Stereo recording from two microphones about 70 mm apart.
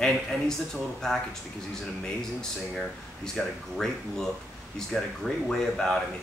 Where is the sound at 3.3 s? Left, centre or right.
Centre.